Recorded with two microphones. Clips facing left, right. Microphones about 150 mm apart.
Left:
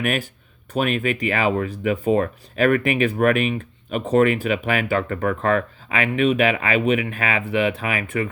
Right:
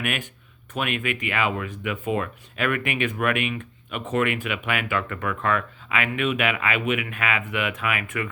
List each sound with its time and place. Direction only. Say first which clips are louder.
0.0 s speech: left 6 dB; 40° left (ahead or behind)